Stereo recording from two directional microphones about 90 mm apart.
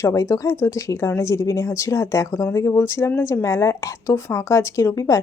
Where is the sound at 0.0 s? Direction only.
35° left (ahead or behind).